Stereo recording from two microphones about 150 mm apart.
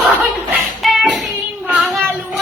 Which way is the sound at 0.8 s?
5° right (ahead or behind).